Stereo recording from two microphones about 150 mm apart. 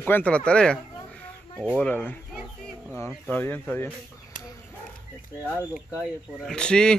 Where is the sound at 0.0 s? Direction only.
10° left (ahead or behind).